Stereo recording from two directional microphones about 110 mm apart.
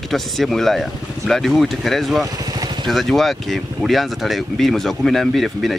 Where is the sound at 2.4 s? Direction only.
35° right (ahead or behind).